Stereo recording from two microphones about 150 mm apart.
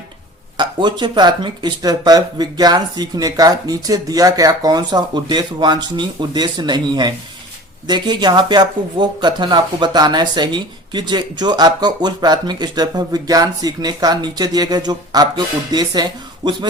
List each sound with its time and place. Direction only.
0.5 s speech: 30° right (ahead or behind)